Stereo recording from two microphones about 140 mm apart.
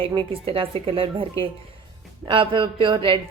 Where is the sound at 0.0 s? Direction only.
40° right (ahead or behind).